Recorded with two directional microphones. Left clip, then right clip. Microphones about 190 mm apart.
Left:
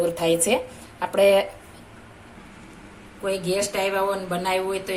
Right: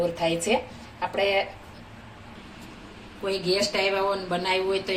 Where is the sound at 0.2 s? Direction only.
55° left (ahead or behind).